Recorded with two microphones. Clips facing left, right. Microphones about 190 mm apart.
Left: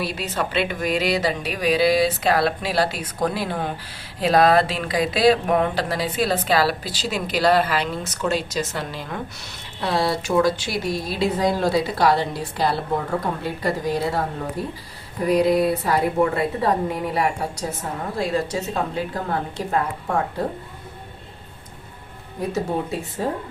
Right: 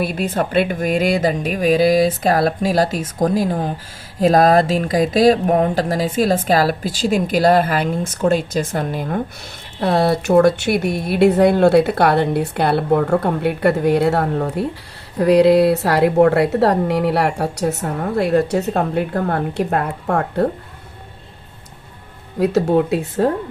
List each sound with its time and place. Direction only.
0.0 s a woman's voice: 50° right (ahead or behind)
22.4 s a woman's voice: 70° right (ahead or behind)